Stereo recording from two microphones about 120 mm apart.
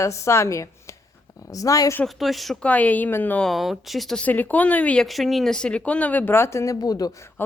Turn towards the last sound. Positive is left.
turn(degrees=25)  # may be behind; listen again after turning